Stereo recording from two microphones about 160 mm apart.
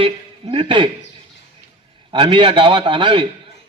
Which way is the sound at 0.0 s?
30° right (ahead or behind).